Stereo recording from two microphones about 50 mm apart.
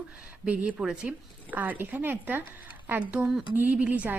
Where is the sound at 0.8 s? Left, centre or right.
Centre.